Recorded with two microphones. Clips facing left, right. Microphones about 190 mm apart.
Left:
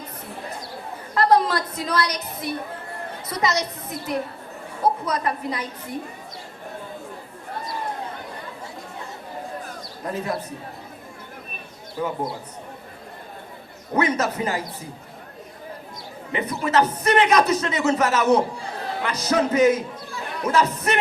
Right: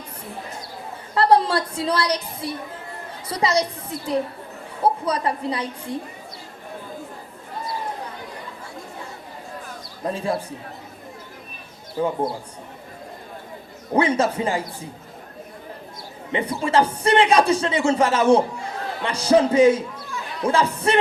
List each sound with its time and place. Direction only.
1.1 s a woman's voice: 30° right (ahead or behind)
10.1 s speech: 30° right (ahead or behind)
12.0 s speech: 30° right (ahead or behind)
13.9 s speech: 30° right (ahead or behind)
16.3 s speech: 30° right (ahead or behind)